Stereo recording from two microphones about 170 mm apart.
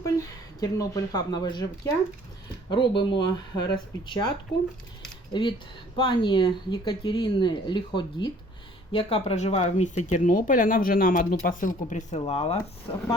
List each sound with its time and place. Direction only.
0.0 s speech: 20° left (ahead or behind)
5.3 s speech: 30° left (ahead or behind)